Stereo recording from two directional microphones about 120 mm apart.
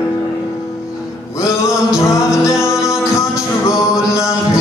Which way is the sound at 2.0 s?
25° left (ahead or behind).